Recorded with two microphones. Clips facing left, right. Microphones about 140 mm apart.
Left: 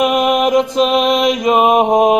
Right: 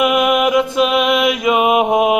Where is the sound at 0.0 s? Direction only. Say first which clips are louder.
Left 1 dB; 35° left (ahead or behind).